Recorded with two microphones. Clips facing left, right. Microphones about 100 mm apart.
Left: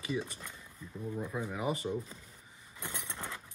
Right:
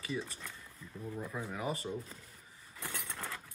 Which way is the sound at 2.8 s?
Centre (ahead or behind).